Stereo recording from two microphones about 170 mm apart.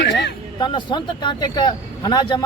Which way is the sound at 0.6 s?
30° left (ahead or behind).